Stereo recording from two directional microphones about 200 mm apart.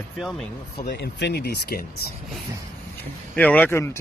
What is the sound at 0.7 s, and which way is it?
Speech, 55° left (ahead or behind).